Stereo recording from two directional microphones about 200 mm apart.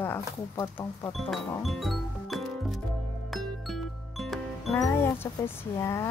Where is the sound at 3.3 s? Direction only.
Centre (ahead or behind).